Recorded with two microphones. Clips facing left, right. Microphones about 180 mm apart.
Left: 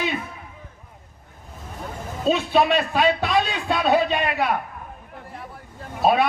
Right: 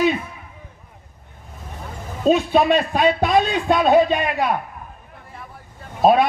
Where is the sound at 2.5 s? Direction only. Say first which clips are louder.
Right 3 dB; 45° right (ahead or behind).